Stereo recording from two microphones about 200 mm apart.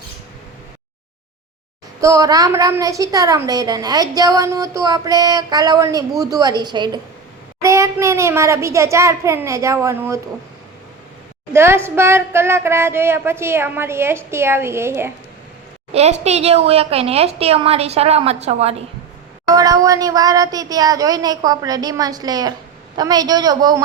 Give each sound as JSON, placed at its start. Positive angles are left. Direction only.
{"t": 2.0, "sound": "a woman's voice", "side_deg": -15}
{"t": 11.5, "sound": "speech", "side_deg": -10}
{"t": 15.9, "sound": "a woman's voice", "side_deg": -35}
{"t": 19.5, "sound": "a woman's voice", "side_deg": -15}